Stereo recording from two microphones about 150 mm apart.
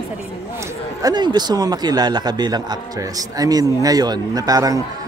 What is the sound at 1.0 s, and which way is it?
A man's voice, 30° right (ahead or behind).